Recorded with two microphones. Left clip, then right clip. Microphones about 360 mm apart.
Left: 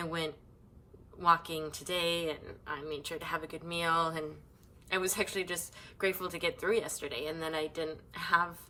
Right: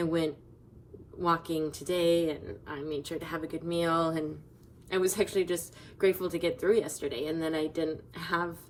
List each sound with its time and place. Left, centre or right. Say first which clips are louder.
0.0 s speech: right 6 dB; centre